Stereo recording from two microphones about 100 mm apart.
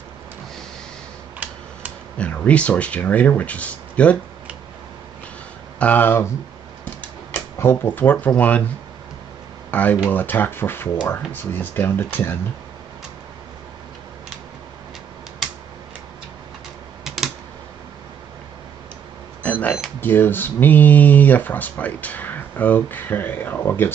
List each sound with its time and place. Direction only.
1.4 s tick-tock: 15° right (ahead or behind)
2.1 s speech: 10° left (ahead or behind)
5.8 s speech: 15° left (ahead or behind)
7.5 s speech: 20° left (ahead or behind)
9.7 s speech: 15° left (ahead or behind)
17.0 s typing: 5° right (ahead or behind)
19.4 s a sound: 15° left (ahead or behind)
20.0 s speech: 20° left (ahead or behind)